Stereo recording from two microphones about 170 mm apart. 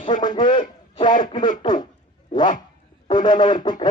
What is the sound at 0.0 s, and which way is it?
Speech, 30° left (ahead or behind).